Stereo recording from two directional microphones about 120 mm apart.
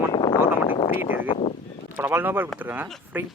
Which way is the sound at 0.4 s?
50° left (ahead or behind).